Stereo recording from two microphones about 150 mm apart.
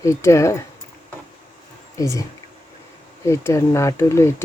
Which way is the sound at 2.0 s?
20° left (ahead or behind).